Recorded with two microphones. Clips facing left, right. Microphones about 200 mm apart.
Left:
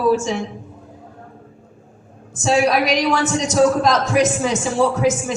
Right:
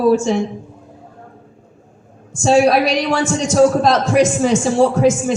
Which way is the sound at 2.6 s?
30° right (ahead or behind).